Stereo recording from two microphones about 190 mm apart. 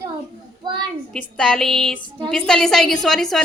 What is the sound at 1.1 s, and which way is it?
A woman's voice, 5° left (ahead or behind).